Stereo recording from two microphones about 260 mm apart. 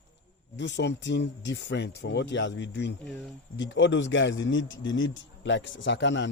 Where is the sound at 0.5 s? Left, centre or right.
Left.